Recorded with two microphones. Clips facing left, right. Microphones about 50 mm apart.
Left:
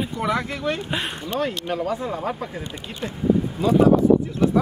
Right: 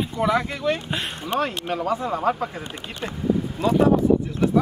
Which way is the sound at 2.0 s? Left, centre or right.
Right.